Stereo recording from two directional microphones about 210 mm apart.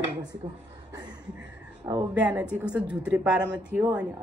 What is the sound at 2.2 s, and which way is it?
A woman's voice, 5° right (ahead or behind).